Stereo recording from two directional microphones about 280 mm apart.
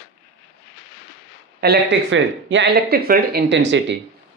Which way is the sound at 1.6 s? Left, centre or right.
Right.